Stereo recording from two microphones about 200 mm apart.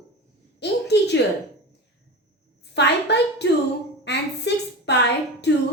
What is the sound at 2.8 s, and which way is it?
A woman's voice, 60° left (ahead or behind).